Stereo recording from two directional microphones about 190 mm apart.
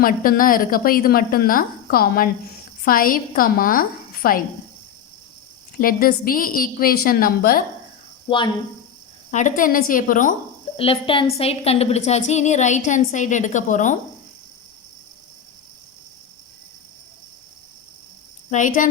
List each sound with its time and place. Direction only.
0.0 s a woman's voice: 50° left (ahead or behind)
5.8 s a woman's voice: 50° left (ahead or behind)
8.3 s a woman's voice: 25° left (ahead or behind)
9.3 s a woman's voice: 45° left (ahead or behind)
10.8 s a woman's voice: 30° left (ahead or behind)
18.5 s a woman's voice: 40° left (ahead or behind)